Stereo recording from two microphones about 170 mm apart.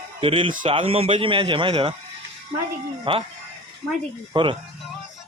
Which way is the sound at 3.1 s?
30° right (ahead or behind).